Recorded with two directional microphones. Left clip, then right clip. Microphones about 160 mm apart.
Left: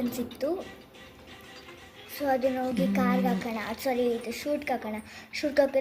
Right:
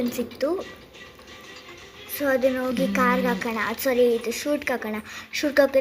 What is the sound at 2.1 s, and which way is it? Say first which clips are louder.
A child's voice: right 5 dB; 45° right (ahead or behind).